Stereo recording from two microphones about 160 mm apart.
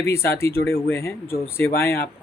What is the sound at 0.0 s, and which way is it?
Speech, 15° left (ahead or behind).